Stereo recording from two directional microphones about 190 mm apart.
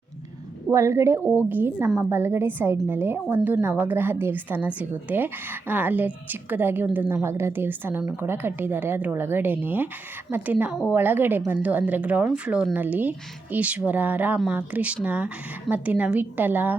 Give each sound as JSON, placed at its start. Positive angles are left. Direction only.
{"t": 0.7, "sound": "a woman's voice", "side_deg": -15}